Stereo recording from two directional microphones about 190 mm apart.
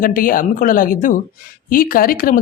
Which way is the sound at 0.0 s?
45° left (ahead or behind).